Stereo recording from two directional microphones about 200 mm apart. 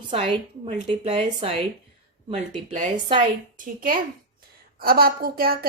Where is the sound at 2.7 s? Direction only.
35° right (ahead or behind).